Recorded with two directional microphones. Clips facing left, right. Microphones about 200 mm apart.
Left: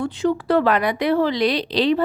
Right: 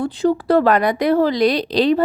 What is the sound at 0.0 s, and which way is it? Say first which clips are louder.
Speech: right 3 dB; 35° right (ahead or behind).